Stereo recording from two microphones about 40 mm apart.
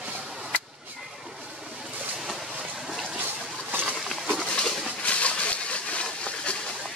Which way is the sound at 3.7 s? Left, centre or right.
Right.